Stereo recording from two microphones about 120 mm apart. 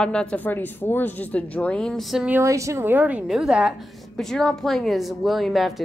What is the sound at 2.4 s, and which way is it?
A woman's voice, 25° right (ahead or behind).